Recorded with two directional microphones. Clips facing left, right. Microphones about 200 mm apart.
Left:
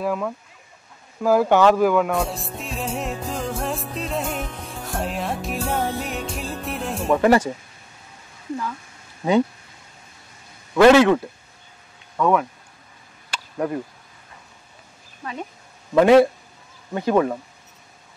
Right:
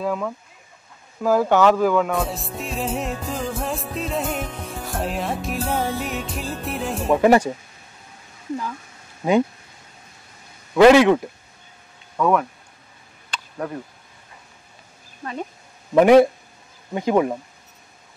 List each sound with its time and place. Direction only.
0.0 s speech: 5° left (ahead or behind)
1.2 s music: 10° left (ahead or behind)
7.2 s a man's voice: 15° right (ahead or behind)
10.7 s a man's voice: 15° right (ahead or behind)
12.2 s speech: centre (ahead or behind)
13.3 s a sound: 10° left (ahead or behind)
15.9 s a man's voice: 15° right (ahead or behind)